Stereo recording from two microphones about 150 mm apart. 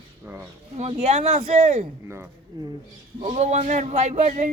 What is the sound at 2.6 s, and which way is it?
Speech, 25° right (ahead or behind).